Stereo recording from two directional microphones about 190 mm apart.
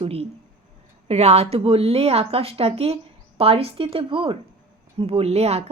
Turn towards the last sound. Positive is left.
turn(degrees=-35)  # may be behind; listen again after turning